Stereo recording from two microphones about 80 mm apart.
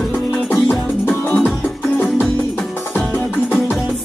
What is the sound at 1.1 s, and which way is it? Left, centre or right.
Music, left.